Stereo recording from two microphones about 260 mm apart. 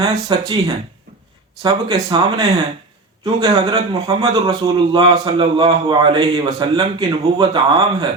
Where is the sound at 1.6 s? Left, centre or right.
Centre.